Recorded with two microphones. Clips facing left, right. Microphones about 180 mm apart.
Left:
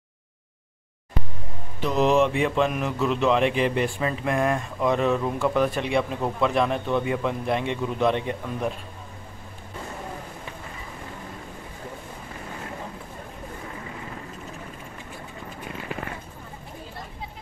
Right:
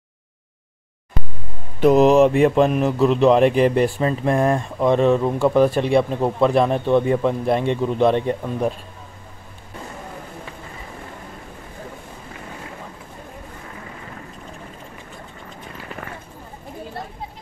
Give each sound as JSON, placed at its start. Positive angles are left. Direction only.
{"t": 1.8, "sound": "speech", "side_deg": -45}